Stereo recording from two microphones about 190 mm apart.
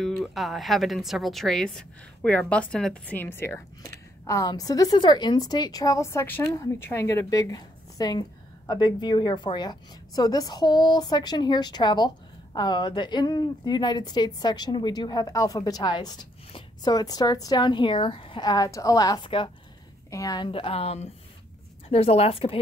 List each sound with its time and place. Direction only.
0.0 s a woman's voice: centre (ahead or behind); by 22.6 s 30° left (ahead or behind)